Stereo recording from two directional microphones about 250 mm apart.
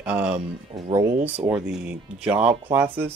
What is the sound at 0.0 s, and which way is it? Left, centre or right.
Speech, centre.